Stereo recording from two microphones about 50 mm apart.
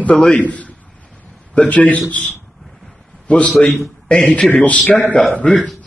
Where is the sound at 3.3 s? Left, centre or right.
Left.